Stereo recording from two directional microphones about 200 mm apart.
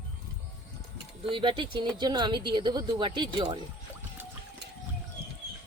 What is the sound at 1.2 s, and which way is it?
Speech, 25° right (ahead or behind).